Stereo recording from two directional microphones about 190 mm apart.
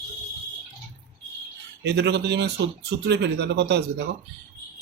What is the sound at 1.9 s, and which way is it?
Speech, 60° right (ahead or behind).